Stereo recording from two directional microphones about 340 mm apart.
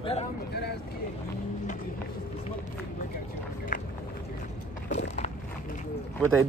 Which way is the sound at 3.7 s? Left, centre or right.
Left.